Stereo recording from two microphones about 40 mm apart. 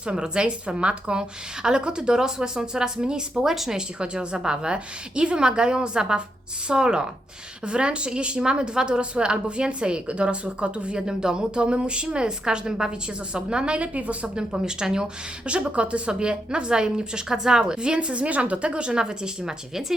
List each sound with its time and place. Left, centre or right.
0.0 s a woman's voice: right
3.4 s speech: centre
3.8 s a woman's voice: right
14.3 s speech: centre
15.4 s a woman's voice: right